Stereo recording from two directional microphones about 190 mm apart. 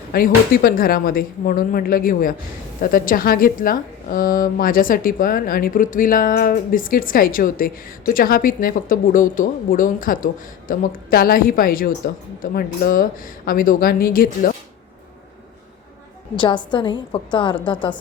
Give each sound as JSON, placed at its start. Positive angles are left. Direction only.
{"t": 0.1, "sound": "speech", "side_deg": 50}
{"t": 16.3, "sound": "a woman's voice", "side_deg": 25}